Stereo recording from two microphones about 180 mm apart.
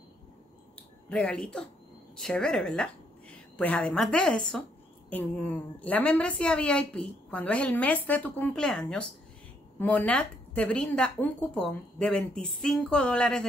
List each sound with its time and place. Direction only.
1.0 s a woman's voice: 5° left (ahead or behind)